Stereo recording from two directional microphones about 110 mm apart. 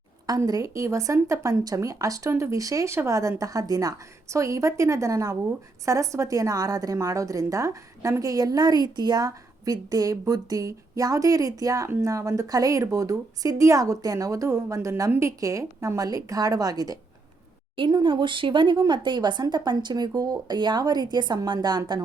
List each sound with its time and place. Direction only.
0.3 s a woman's voice: 35° right (ahead or behind)
17.7 s a woman's voice: 45° right (ahead or behind)